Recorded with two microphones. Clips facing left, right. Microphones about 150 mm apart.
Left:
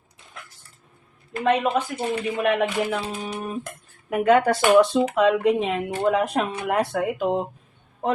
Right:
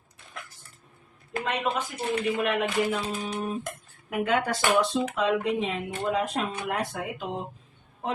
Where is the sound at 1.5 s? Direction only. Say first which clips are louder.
Left 8 dB; 60° left (ahead or behind).